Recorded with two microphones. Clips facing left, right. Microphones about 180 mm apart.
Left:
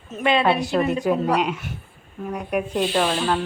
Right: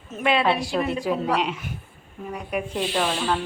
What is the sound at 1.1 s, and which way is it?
A woman's voice, centre (ahead or behind).